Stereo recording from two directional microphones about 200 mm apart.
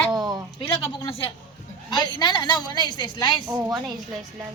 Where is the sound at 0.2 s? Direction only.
20° right (ahead or behind).